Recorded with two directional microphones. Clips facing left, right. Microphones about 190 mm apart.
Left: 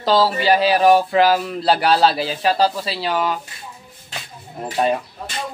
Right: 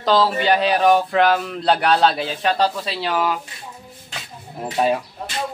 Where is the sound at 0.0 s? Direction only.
Centre (ahead or behind).